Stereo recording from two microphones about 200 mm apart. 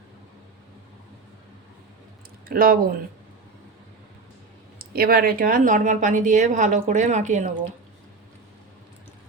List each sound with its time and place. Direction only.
2.5 s speech: 45° right (ahead or behind)
4.8 s speech: 50° right (ahead or behind)